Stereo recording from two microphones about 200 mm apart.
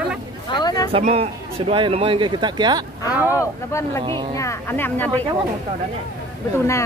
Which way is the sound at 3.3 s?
15° left (ahead or behind).